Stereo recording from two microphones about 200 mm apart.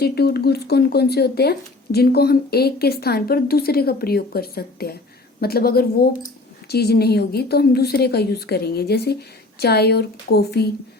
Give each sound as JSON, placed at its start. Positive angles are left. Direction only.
{"t": 0.0, "sound": "speech", "side_deg": 50}